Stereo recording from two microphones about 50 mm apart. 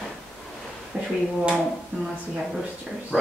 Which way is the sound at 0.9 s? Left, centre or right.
Centre.